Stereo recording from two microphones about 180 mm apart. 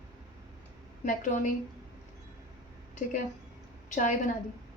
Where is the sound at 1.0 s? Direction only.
45° left (ahead or behind).